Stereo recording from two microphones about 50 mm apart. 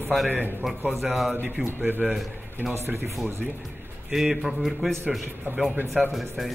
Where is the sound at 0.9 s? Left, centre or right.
Centre.